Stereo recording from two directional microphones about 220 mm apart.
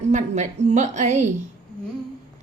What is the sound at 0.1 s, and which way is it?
A woman's voice, 35° right (ahead or behind).